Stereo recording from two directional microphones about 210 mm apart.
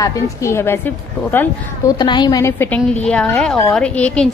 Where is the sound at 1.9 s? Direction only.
20° left (ahead or behind).